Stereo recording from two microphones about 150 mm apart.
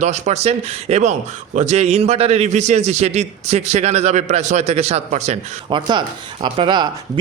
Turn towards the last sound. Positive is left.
turn(degrees=-30)  # may be behind; listen again after turning